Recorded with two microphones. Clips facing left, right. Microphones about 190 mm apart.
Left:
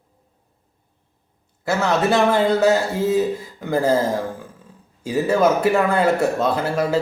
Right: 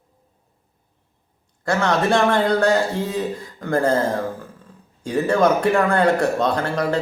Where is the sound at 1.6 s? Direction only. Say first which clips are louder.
Even; 5° left (ahead or behind).